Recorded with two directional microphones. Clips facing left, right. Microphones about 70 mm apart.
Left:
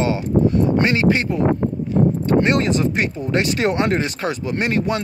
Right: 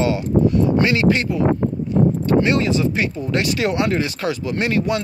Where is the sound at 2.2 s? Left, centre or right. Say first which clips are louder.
Even; left.